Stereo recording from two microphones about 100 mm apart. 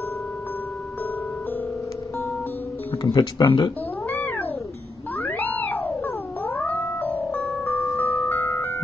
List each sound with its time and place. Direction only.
3.0 s speech: 45° left (ahead or behind)
4.1 s cat: 20° left (ahead or behind)
5.1 s theremin: 20° left (ahead or behind)